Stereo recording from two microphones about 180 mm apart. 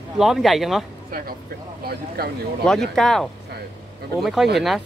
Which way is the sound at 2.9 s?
5° left (ahead or behind).